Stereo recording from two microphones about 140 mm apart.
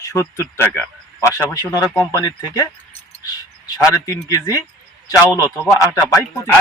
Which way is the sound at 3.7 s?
20° left (ahead or behind).